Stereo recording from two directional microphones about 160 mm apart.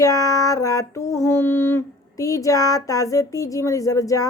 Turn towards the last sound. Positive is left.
turn(degrees=20)  # may be behind; listen again after turning